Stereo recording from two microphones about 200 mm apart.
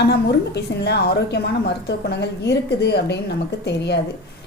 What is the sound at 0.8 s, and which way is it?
A woman's voice, 55° left (ahead or behind).